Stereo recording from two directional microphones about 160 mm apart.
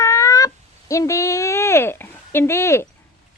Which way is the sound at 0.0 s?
20° left (ahead or behind).